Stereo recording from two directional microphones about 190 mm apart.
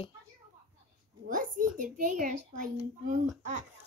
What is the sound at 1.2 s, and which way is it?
A woman's voice, 45° right (ahead or behind).